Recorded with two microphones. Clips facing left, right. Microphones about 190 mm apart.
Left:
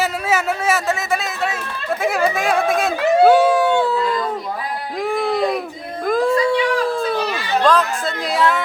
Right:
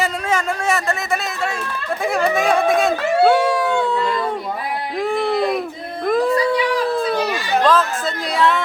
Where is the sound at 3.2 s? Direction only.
5° left (ahead or behind).